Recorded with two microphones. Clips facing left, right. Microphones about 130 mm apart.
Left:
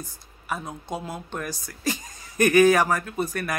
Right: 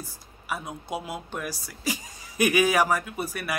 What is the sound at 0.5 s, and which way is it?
Speech, 10° right (ahead or behind).